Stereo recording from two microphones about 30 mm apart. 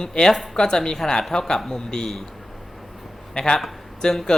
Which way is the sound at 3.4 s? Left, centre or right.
Left.